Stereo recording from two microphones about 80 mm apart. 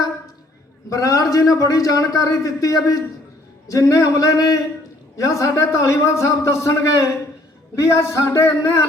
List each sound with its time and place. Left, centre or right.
0.9 s a man's voice: left